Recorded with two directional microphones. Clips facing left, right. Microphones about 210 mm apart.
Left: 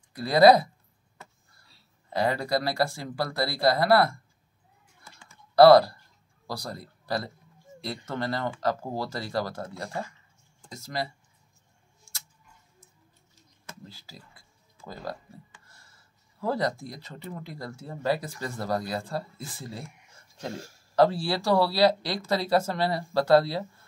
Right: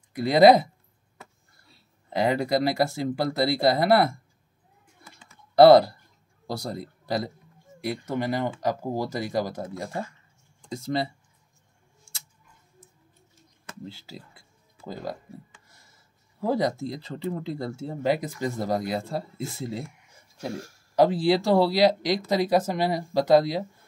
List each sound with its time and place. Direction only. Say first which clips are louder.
0.1 s speech: right 2 dB; 20° right (ahead or behind)
2.1 s speech: right 3 dB; 20° right (ahead or behind)
5.0 s typing: right 1 dB; 20° right (ahead or behind)
6.4 s a man's voice: right 4 dB; 20° right (ahead or behind)
13.8 s speech: right 7 dB; 25° right (ahead or behind)
16.3 s speech: right 3 dB; 20° right (ahead or behind)
20.5 s speech: right 3 dB; 25° left (ahead or behind)
20.9 s speech: right 3 dB; 15° right (ahead or behind)